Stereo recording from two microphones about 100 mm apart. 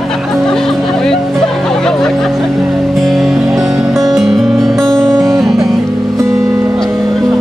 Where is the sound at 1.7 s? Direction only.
5° left (ahead or behind).